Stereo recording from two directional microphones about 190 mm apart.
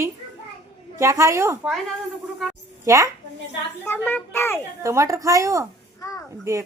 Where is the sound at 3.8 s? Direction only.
10° left (ahead or behind).